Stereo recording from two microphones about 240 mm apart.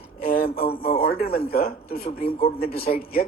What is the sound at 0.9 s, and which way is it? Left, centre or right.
A man's voice, left.